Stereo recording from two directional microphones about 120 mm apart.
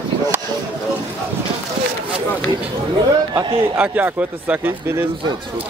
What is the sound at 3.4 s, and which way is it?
Speech, 50° right (ahead or behind).